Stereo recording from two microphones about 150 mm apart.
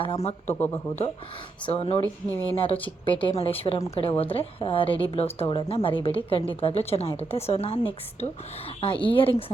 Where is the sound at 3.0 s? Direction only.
35° left (ahead or behind).